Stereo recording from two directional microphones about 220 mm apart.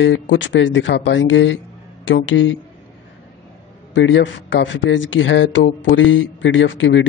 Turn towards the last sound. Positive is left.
turn(degrees=55)  # may be behind; listen again after turning